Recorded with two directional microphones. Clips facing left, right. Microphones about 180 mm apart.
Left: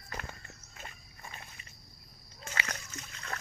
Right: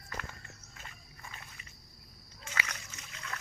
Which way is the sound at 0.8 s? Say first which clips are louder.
Left 4 dB; 25° left (ahead or behind).